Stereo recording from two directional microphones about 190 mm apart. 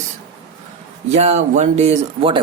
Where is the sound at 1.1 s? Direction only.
35° right (ahead or behind).